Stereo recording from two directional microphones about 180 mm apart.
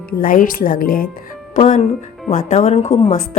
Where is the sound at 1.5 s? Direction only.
35° left (ahead or behind).